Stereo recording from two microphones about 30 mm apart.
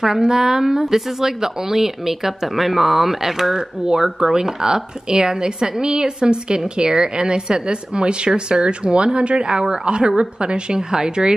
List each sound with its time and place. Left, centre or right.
0.0 s a woman's voice: right